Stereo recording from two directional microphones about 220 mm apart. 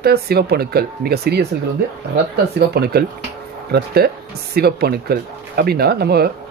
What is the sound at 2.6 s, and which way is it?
Speech, 45° right (ahead or behind).